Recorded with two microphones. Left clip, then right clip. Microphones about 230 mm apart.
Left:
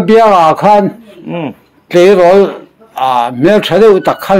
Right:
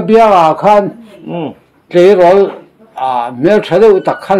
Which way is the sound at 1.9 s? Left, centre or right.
Left.